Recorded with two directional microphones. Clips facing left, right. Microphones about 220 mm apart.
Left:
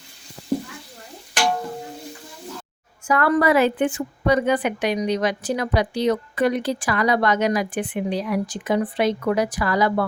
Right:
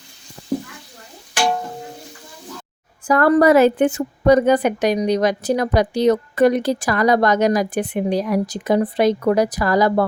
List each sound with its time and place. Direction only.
3.1 s a woman's voice: 40° right (ahead or behind)